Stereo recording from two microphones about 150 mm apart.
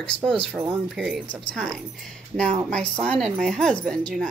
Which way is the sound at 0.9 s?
Centre (ahead or behind).